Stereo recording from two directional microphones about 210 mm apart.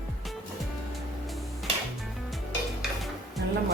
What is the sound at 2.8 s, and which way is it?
Dishes, centre (ahead or behind).